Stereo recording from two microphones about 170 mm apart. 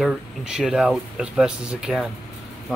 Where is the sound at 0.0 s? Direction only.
5° right (ahead or behind).